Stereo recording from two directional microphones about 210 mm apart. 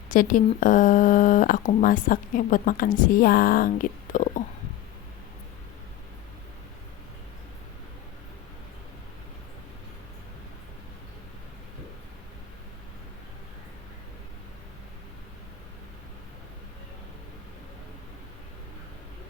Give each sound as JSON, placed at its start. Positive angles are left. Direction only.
{"t": 0.1, "sound": "speech", "side_deg": 40}